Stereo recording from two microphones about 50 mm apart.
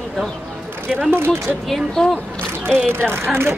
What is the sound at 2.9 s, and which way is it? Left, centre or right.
Speech, right.